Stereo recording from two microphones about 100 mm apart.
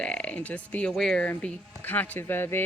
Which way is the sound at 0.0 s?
10° left (ahead or behind).